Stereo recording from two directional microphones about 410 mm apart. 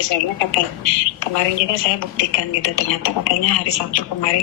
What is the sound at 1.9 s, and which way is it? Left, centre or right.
Speech, left.